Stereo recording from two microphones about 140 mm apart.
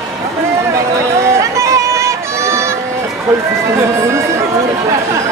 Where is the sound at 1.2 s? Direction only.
20° right (ahead or behind).